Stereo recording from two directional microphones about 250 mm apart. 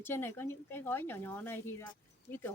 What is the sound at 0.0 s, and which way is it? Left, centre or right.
A woman's voice, centre.